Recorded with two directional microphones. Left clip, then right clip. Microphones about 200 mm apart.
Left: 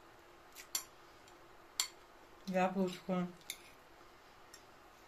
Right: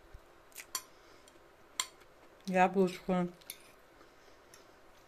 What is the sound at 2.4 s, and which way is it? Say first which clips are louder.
Speech: right 7 dB; 50° right (ahead or behind).